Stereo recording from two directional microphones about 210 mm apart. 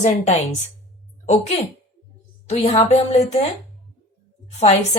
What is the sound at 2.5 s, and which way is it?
Speech, 30° left (ahead or behind).